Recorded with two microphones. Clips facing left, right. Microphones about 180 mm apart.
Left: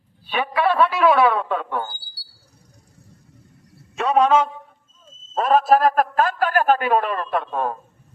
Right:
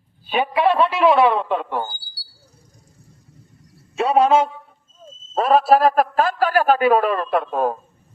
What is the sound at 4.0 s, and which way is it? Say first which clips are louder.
Speech: right 1 dB; 35° right (ahead or behind).